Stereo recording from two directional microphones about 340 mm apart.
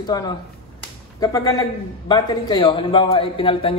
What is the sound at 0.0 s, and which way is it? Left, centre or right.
A man's voice, centre.